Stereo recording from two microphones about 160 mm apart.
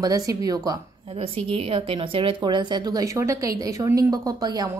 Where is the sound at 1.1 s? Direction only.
35° right (ahead or behind).